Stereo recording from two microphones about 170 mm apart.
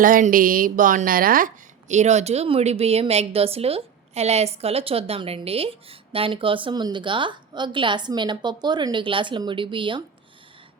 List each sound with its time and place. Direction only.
0.0 s a woman's voice: 55° right (ahead or behind); by 10.0 s 30° right (ahead or behind)